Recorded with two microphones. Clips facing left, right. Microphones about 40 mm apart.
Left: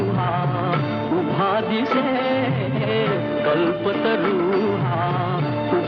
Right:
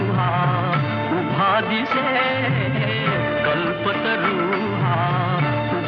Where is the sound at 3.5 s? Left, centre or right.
Centre.